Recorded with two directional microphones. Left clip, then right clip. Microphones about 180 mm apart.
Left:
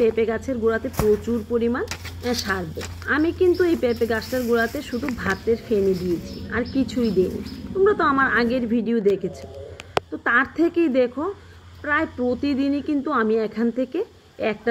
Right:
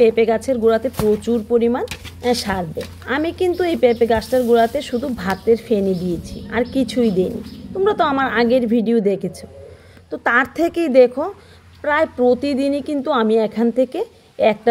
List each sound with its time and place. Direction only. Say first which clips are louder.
0.0 s a woman's voice: right 6 dB; 40° right (ahead or behind)